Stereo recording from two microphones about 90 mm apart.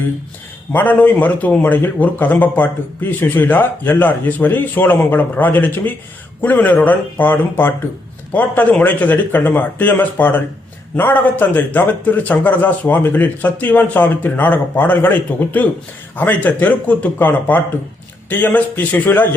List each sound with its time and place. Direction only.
0.7 s speech: 20° left (ahead or behind)